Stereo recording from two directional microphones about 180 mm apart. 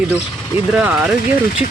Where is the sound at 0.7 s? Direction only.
5° right (ahead or behind).